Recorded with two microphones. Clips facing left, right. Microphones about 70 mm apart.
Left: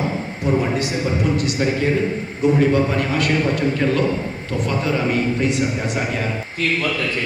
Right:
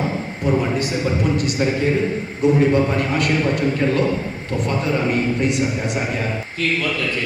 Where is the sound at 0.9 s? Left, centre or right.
Centre.